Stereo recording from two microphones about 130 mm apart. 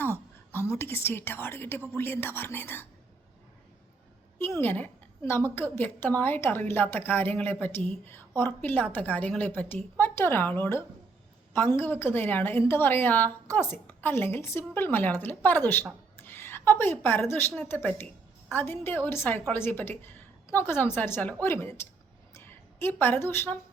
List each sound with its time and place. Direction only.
0.0 s a woman's voice: 15° left (ahead or behind)
4.4 s a woman's voice: 20° left (ahead or behind)